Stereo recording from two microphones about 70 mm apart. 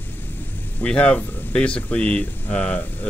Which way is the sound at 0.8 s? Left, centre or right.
Centre.